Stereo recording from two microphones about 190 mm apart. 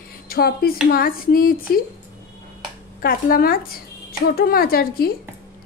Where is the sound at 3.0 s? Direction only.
50° left (ahead or behind).